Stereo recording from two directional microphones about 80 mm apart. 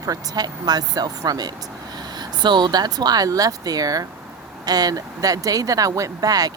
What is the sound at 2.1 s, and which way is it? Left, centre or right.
Speech, right.